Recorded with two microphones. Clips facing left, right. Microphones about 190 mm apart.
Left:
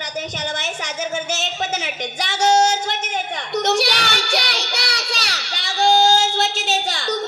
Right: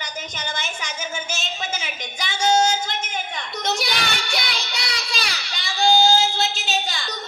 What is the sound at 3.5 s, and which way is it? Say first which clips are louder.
Child singing: left 7 dB; 75° left (ahead or behind).